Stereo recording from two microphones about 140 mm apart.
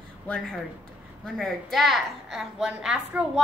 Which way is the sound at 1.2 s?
Centre (ahead or behind).